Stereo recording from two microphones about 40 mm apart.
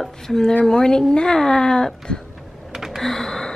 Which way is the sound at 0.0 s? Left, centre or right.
Centre.